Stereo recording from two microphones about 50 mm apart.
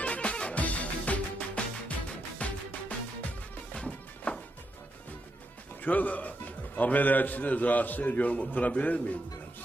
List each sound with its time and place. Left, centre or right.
0.0 s music: left
3.8 s music: left
5.8 s a man's voice: left